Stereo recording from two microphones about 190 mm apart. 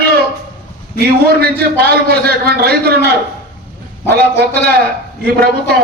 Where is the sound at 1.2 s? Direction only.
55° right (ahead or behind).